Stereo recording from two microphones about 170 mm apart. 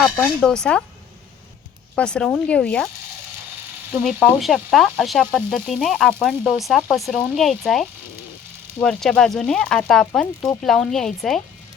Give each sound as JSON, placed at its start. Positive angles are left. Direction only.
{"t": 0.2, "sound": "sizzle", "side_deg": 5}
{"t": 2.0, "sound": "sizzle", "side_deg": 5}
{"t": 4.0, "sound": "sizzle", "side_deg": 0}